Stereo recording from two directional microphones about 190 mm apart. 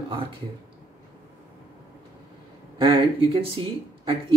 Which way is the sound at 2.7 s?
25° right (ahead or behind).